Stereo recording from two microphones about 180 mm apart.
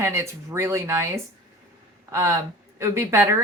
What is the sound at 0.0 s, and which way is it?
Speech, 15° right (ahead or behind).